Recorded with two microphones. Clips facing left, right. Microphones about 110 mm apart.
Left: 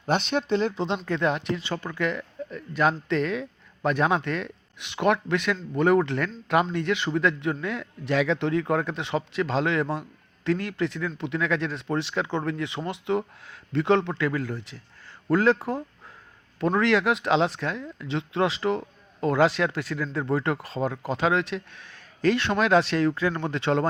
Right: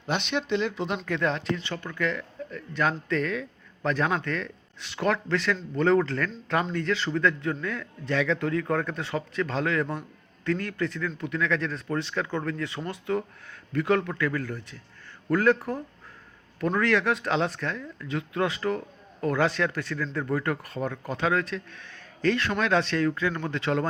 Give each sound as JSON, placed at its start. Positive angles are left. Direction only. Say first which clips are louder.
{"t": 0.1, "sound": "speech", "louder": "left 3 dB", "side_deg": 40}
{"t": 2.0, "sound": "a man's voice", "louder": "right 1 dB", "side_deg": 20}